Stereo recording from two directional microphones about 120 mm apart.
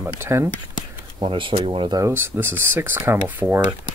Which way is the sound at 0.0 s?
20° right (ahead or behind).